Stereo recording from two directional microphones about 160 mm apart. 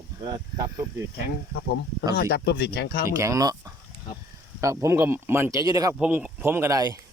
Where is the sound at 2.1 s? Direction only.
90° left.